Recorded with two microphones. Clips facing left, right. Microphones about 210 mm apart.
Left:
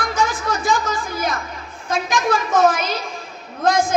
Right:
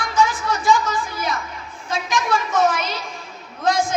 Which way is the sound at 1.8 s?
50° left (ahead or behind).